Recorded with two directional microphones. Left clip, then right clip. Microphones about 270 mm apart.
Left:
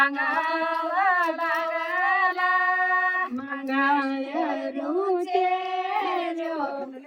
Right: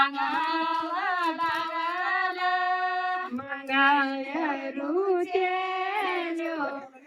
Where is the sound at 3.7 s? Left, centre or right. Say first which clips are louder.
Right 1 dB; left.